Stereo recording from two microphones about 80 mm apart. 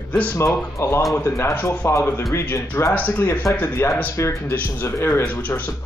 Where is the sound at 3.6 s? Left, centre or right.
Left.